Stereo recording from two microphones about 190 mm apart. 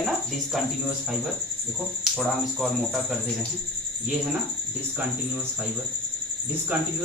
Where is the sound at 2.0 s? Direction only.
Centre (ahead or behind).